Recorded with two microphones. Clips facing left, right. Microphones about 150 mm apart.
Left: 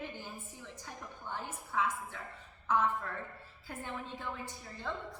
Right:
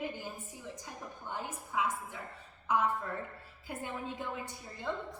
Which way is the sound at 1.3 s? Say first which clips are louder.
Right 1 dB; 15° right (ahead or behind).